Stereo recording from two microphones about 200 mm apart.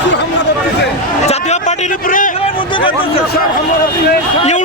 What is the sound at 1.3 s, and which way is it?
Speech, 35° left (ahead or behind).